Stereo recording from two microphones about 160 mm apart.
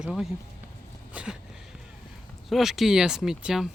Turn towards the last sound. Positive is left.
turn(degrees=0)  # may be behind; listen again after turning